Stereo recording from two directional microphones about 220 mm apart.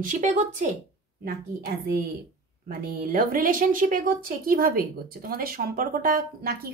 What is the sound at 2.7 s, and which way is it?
A woman's voice, 40° right (ahead or behind).